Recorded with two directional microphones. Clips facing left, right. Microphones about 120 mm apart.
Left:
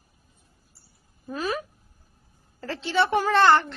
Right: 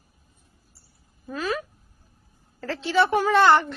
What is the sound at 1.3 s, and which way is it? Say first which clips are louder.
Speech: right 1 dB; 10° left (ahead or behind).